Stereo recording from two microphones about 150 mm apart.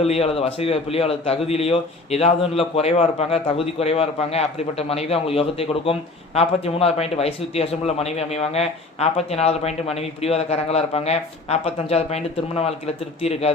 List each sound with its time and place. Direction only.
0.0 s a man's voice: 40° left (ahead or behind)